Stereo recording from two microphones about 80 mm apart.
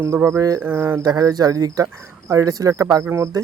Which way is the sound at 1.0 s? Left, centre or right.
Right.